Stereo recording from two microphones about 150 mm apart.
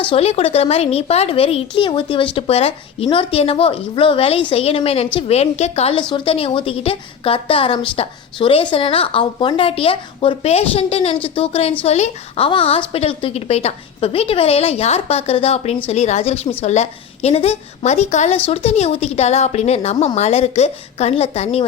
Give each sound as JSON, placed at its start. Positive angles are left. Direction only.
{"t": 0.0, "sound": "a woman's voice", "side_deg": 40}